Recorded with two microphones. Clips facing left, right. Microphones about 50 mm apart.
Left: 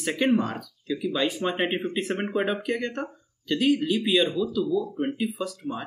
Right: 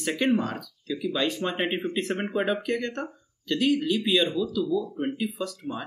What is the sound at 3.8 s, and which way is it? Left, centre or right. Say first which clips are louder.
Speech: left 1 dB; left.